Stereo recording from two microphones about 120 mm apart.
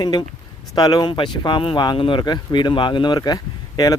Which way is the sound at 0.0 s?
35° left (ahead or behind).